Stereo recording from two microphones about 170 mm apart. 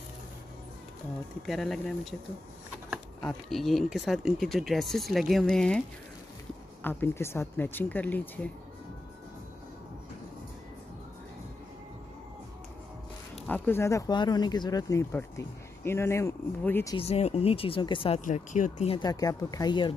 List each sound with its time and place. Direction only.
1.4 s speech: centre (ahead or behind)
3.2 s speech: 5° left (ahead or behind)
6.8 s speech: 10° left (ahead or behind)
13.5 s speech: 15° left (ahead or behind)
16.9 s speech: 35° left (ahead or behind)
18.2 s speech: 50° left (ahead or behind)
18.9 s speech: 20° left (ahead or behind)